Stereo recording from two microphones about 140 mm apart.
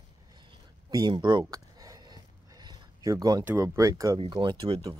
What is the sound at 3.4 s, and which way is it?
Speech, 20° right (ahead or behind).